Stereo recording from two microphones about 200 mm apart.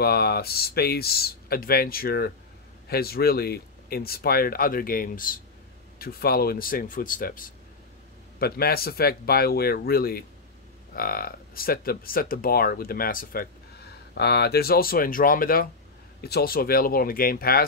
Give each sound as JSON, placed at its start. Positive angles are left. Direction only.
{"t": 0.0, "sound": "speech", "side_deg": 50}